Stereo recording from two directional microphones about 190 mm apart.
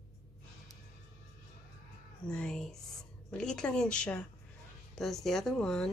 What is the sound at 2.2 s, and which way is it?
Speech, 5° left (ahead or behind).